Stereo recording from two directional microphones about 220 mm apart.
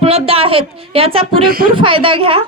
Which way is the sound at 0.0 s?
25° right (ahead or behind).